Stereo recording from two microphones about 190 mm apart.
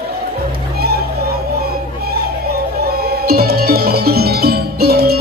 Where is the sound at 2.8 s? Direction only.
55° right (ahead or behind).